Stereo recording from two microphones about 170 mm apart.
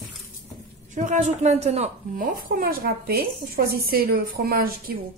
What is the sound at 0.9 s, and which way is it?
A woman's voice, 45° right (ahead or behind).